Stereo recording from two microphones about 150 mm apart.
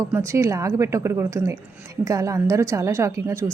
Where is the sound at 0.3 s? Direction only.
20° right (ahead or behind).